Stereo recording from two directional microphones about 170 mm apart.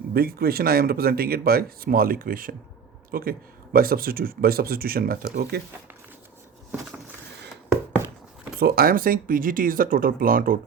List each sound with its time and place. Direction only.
0.1 s speech: 65° right (ahead or behind)
8.5 s speech: 60° right (ahead or behind)